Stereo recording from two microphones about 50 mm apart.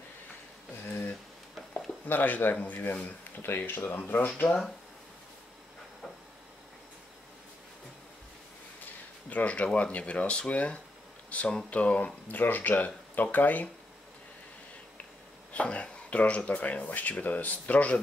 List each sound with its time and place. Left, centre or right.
0.8 s a sound: left
2.0 s speech: left
4.0 s speech: left
9.3 s speech: left
15.5 s speech: left